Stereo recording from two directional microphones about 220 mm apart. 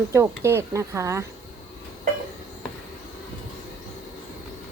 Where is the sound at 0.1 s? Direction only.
10° right (ahead or behind).